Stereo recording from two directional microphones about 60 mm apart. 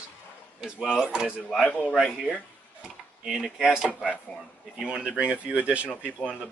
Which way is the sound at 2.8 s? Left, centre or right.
Centre.